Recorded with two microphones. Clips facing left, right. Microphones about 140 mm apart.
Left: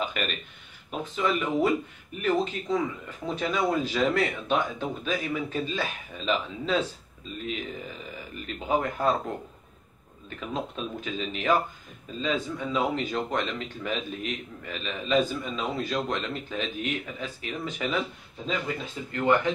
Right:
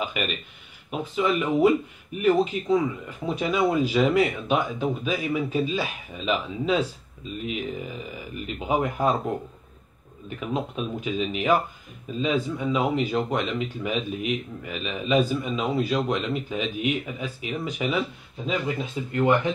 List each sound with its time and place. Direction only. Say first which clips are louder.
0.0 s speech: right 2 dB; 5° right (ahead or behind)
10.4 s speech: right 4 dB; 10° right (ahead or behind)
19.1 s speech: right 2 dB; 20° right (ahead or behind)